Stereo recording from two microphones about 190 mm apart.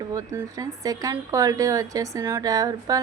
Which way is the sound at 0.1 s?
15° right (ahead or behind).